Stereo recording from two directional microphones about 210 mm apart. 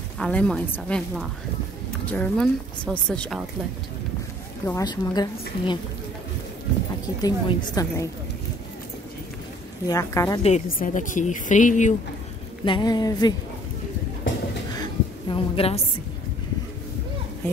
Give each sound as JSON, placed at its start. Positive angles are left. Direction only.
{"t": 0.2, "sound": "speech", "side_deg": 5}
{"t": 4.6, "sound": "a woman's voice", "side_deg": 15}
{"t": 7.2, "sound": "a woman's voice", "side_deg": 20}
{"t": 9.8, "sound": "a woman's voice", "side_deg": 15}
{"t": 10.4, "sound": "a woman's voice", "side_deg": 35}
{"t": 12.6, "sound": "a woman's voice", "side_deg": 20}
{"t": 14.8, "sound": "a sound", "side_deg": 25}